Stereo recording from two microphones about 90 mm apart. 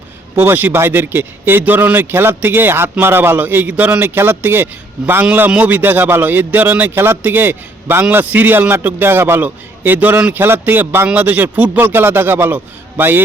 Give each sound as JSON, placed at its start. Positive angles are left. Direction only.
{"t": 0.3, "sound": "a man's voice", "side_deg": -25}